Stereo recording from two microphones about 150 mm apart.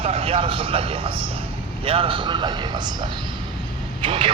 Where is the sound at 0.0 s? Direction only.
40° right (ahead or behind).